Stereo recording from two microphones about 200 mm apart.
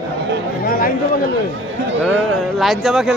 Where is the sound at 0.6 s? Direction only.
50° left (ahead or behind).